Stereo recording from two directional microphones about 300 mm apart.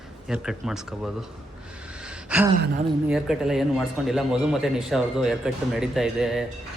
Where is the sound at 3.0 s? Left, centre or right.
Centre.